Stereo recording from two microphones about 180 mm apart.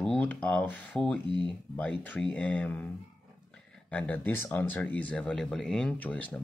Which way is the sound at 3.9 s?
10° left (ahead or behind).